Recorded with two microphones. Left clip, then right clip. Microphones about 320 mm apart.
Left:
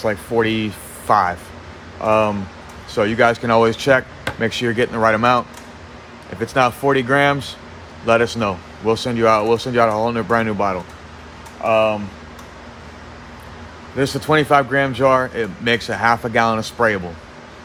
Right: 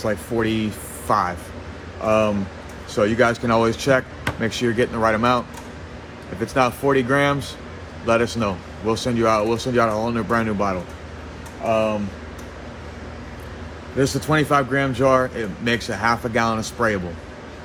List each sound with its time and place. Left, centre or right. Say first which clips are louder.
0.0 s speech: left 4 dB; left
14.0 s speech: left 3 dB; left